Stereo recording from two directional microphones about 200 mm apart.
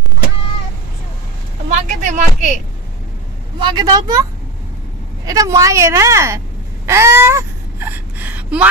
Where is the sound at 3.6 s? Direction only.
20° right (ahead or behind).